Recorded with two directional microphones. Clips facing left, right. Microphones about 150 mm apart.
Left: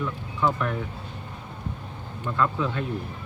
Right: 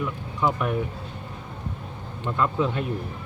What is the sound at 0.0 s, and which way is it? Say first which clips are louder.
Speech: even; 15° right (ahead or behind).